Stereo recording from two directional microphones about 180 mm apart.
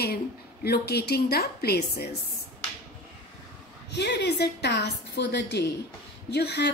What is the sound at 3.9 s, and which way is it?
A woman's voice, 70° left (ahead or behind).